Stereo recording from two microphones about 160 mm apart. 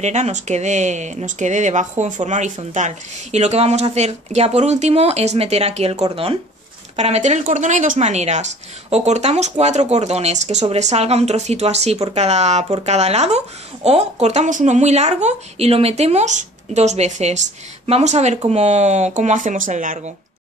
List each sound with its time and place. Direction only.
0.0 s speech: 45° right (ahead or behind)